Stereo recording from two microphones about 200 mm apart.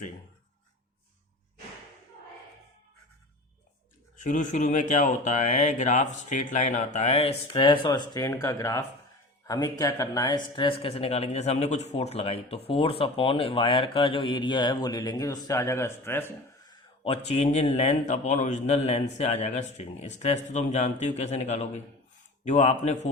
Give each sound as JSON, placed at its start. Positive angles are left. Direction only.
{"t": 4.2, "sound": "speech", "side_deg": 40}
{"t": 17.0, "sound": "speech", "side_deg": 30}